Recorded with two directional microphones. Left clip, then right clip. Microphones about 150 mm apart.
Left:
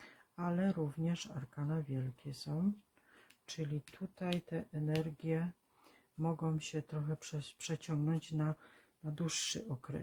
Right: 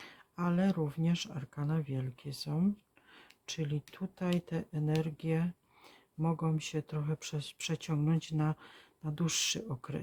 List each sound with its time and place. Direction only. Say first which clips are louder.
0.0 s speech: right 5 dB; 35° right (ahead or behind)